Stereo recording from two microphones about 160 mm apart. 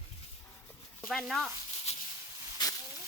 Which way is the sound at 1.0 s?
Centre (ahead or behind).